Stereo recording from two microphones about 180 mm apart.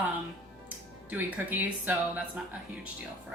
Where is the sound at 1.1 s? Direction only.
10° right (ahead or behind).